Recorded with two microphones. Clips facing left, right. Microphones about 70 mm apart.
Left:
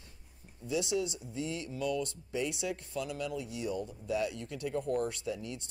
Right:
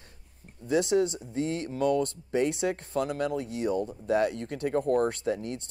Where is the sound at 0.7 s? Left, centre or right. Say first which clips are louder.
Right 8 dB; right.